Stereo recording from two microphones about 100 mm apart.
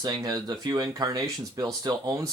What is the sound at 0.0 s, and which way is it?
Speech, 40° right (ahead or behind).